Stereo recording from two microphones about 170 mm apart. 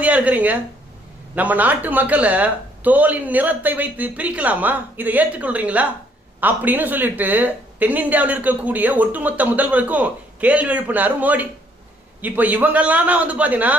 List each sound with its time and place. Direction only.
0.0 s speech: 10° right (ahead or behind)